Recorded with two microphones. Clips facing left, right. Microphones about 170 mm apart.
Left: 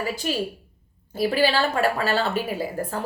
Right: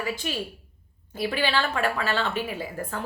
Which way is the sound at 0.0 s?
40° left (ahead or behind).